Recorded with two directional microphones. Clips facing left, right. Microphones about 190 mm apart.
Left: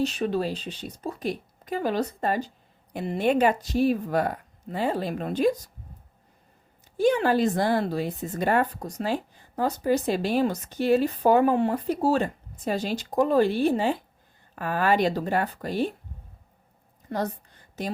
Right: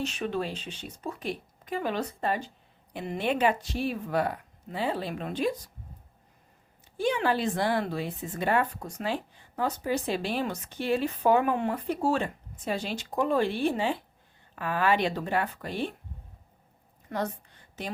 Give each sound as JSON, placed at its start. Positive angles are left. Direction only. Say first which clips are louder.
{"t": 0.0, "sound": "speech", "louder": "left 5 dB", "side_deg": 35}
{"t": 6.9, "sound": "speech", "louder": "left 5 dB", "side_deg": 40}
{"t": 17.1, "sound": "speech", "louder": "left 3 dB", "side_deg": 30}